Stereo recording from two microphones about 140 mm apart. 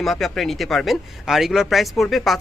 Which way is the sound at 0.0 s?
Centre (ahead or behind).